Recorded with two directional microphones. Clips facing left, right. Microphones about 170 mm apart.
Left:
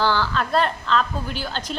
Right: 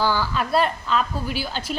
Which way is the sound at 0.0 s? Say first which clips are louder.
Left 1 dB; 10° right (ahead or behind).